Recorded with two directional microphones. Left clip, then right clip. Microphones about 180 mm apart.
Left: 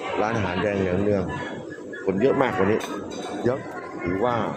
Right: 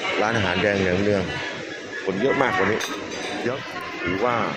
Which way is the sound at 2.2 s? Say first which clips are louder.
Right 1 dB; 15° left (ahead or behind).